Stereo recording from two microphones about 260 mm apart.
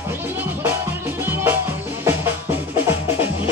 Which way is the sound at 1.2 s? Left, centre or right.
Centre.